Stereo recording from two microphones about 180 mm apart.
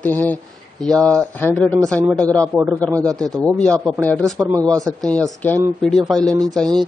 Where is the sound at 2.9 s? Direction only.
20° right (ahead or behind).